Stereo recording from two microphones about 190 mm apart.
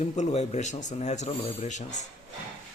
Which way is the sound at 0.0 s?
35° left (ahead or behind).